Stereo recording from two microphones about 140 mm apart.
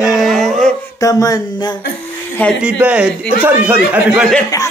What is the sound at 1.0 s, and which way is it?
Speech, 25° left (ahead or behind).